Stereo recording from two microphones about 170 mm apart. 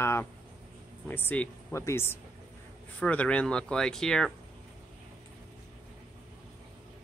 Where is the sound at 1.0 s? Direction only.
10° left (ahead or behind).